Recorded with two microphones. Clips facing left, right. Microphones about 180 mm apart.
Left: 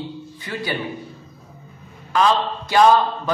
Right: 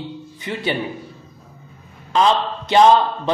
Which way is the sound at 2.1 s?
20° right (ahead or behind).